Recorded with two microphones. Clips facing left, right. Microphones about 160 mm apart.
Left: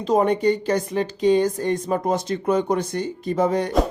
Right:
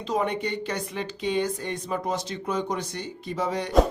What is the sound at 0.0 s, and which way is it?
Speech, 45° left (ahead or behind).